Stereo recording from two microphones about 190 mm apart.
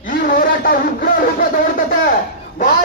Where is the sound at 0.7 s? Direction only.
50° left (ahead or behind).